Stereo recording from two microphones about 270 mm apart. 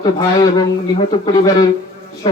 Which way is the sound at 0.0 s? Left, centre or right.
Centre.